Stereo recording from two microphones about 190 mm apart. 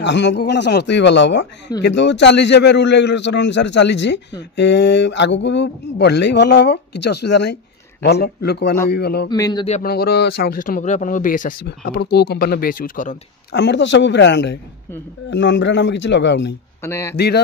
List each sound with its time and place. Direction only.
0.0 s a man's voice: 65° left (ahead or behind)
9.3 s a man's voice: 20° left (ahead or behind)
9.7 s speech: 45° left (ahead or behind)
13.5 s a man's voice: 65° left (ahead or behind)
16.8 s speech: 15° left (ahead or behind)